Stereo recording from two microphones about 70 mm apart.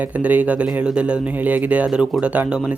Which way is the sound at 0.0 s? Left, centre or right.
Right.